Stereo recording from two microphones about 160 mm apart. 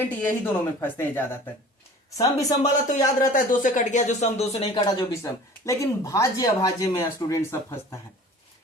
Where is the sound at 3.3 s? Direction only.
55° left (ahead or behind); by 4.8 s 40° left (ahead or behind).